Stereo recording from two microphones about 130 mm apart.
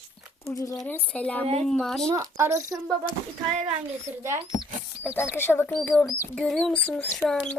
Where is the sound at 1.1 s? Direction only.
10° left (ahead or behind).